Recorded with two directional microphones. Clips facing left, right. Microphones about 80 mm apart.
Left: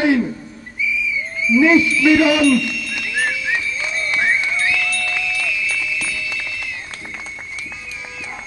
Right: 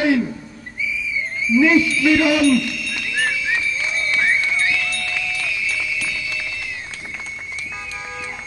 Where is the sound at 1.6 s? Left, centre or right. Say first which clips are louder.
Left 2 dB; left.